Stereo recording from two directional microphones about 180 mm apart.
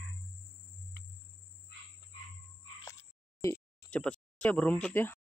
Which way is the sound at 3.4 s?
10° left (ahead or behind).